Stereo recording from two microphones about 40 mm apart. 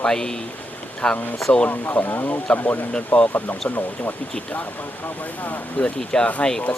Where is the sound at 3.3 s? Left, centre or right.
Left.